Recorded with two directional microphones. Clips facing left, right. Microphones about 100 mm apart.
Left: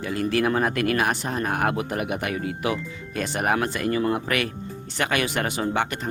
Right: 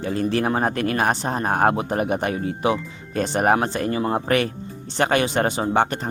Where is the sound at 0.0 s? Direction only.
30° right (ahead or behind).